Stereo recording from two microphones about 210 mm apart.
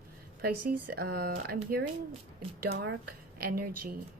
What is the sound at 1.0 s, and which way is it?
Speech, 50° right (ahead or behind).